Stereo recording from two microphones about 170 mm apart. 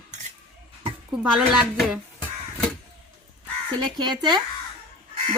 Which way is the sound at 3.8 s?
25° right (ahead or behind).